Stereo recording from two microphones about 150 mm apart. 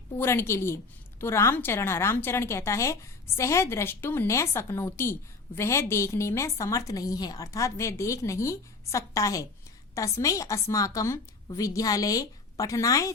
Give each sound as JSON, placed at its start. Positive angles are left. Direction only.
{"t": 0.2, "sound": "a woman's voice", "side_deg": 15}